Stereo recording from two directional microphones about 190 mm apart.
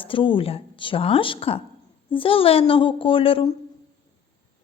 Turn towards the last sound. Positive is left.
turn(degrees=30)  # may be behind; listen again after turning